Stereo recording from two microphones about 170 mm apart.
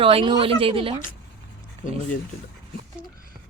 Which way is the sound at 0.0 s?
30° right (ahead or behind).